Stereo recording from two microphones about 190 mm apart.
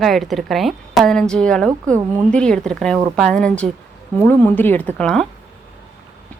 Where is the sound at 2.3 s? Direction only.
5° left (ahead or behind).